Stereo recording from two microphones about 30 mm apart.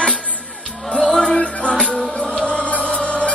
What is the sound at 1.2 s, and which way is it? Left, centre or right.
Music, left.